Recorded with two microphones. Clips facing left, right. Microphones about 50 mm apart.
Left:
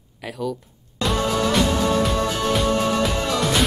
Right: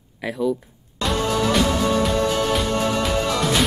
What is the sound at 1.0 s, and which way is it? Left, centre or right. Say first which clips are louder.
Music: even; centre.